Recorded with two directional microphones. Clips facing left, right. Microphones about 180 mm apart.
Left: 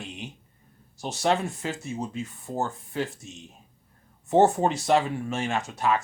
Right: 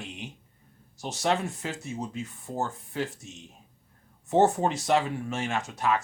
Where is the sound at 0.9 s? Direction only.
30° left (ahead or behind).